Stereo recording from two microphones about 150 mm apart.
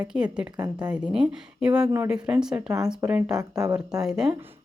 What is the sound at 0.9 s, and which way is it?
A woman's voice, 5° right (ahead or behind).